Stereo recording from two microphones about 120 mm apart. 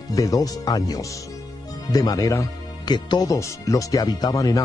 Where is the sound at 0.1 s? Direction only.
30° left (ahead or behind).